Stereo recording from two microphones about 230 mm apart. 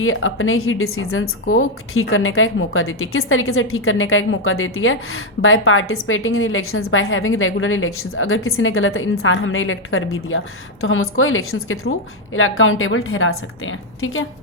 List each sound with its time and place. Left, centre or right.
0.0 s a woman's voice: left